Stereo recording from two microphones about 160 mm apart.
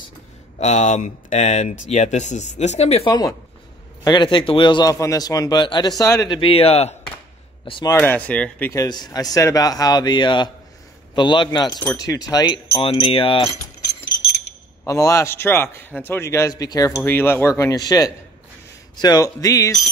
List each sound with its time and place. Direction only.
0.6 s speech: 50° left (ahead or behind)
3.1 s a man's voice: 25° left (ahead or behind)
8.0 s a man's voice: 10° left (ahead or behind)
8.7 s a man's voice: 25° left (ahead or behind)
14.9 s a man's voice: 20° left (ahead or behind)